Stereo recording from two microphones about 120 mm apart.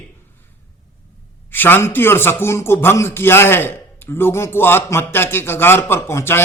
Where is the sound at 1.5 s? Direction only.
15° left (ahead or behind).